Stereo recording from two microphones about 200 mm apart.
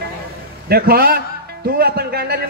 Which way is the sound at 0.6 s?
50° right (ahead or behind).